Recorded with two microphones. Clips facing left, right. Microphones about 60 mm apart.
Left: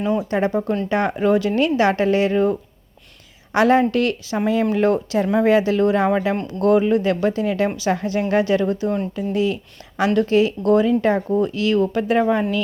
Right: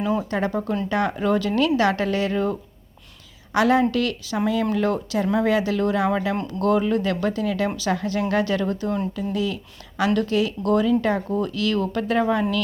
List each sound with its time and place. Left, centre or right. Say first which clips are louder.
0.0 s speech: left 2 dB; centre
0.3 s speech: left 4 dB; left